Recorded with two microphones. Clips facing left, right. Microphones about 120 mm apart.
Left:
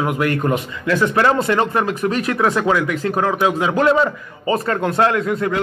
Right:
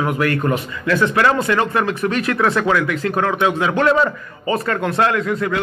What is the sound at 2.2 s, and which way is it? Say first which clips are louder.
A man's voice: even; 20° left (ahead or behind).